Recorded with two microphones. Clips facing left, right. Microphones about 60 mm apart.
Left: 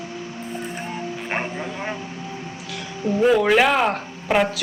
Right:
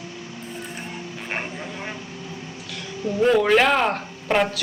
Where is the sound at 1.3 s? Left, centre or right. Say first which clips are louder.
Left 2 dB; left.